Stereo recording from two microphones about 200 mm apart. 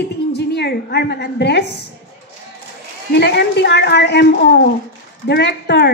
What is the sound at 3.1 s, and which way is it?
A woman's voice, 60° left (ahead or behind).